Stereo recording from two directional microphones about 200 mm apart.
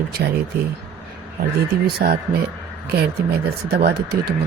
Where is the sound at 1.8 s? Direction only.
50° right (ahead or behind).